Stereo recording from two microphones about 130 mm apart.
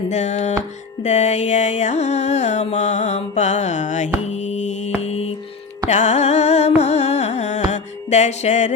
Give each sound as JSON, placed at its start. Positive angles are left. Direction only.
{"t": 0.1, "sound": "music", "side_deg": 65}
{"t": 4.3, "sound": "mantra", "side_deg": 60}
{"t": 5.9, "sound": "carnatic music", "side_deg": 60}